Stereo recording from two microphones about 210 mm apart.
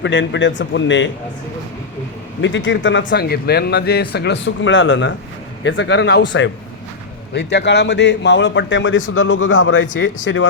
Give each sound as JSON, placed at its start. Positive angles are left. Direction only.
{"t": 0.0, "sound": "a man's voice", "side_deg": 60}
{"t": 2.4, "sound": "a man's voice", "side_deg": 60}